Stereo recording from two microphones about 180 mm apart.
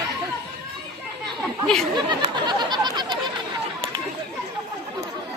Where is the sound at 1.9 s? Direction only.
25° right (ahead or behind).